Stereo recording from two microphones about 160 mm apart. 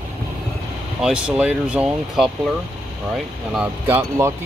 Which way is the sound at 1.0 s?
5° right (ahead or behind).